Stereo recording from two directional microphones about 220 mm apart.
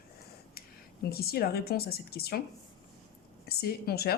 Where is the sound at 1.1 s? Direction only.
45° left (ahead or behind).